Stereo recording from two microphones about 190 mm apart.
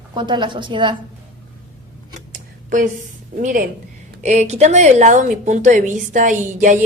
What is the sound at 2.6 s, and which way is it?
A woman's voice, 45° right (ahead or behind).